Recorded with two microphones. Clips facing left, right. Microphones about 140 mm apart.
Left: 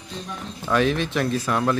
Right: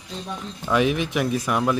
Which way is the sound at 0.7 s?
15° right (ahead or behind).